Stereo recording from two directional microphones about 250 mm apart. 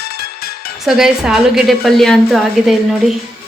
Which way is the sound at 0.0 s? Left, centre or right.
Left.